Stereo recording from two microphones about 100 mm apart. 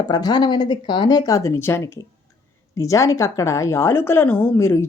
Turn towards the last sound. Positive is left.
turn(degrees=25)  # may be behind; listen again after turning